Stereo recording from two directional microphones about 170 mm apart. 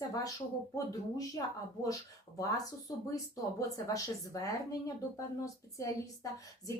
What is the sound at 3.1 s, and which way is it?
A woman's voice, 20° left (ahead or behind).